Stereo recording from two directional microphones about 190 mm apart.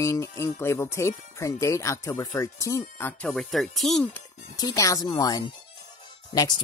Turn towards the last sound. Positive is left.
turn(degrees=20)  # may be behind; listen again after turning